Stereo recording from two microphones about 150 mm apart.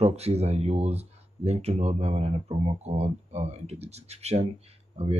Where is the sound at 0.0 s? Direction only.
45° right (ahead or behind).